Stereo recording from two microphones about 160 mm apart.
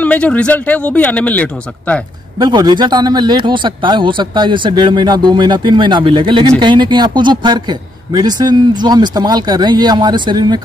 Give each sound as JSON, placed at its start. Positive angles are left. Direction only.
{"t": 0.0, "sound": "a man's voice", "side_deg": 10}
{"t": 2.3, "sound": "a man's voice", "side_deg": -25}